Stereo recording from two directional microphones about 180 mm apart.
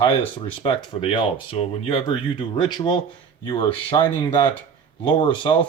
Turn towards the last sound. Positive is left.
turn(degrees=25)  # may be behind; listen again after turning